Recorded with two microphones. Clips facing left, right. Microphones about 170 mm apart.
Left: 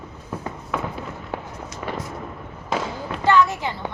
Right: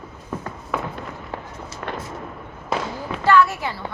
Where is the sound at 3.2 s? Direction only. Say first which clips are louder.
Right 1 dB; 20° left (ahead or behind).